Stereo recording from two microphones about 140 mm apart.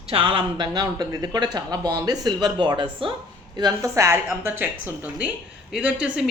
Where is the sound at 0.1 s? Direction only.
40° right (ahead or behind).